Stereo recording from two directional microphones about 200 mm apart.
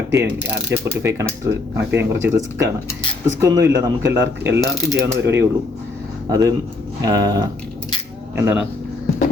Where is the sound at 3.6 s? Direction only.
15° right (ahead or behind).